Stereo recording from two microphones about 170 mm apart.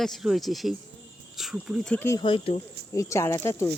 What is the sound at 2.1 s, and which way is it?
Speech, 30° left (ahead or behind).